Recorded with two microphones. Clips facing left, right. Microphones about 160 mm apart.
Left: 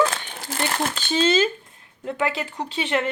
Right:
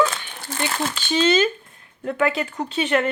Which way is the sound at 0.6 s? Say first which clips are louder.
Even; 50° left (ahead or behind).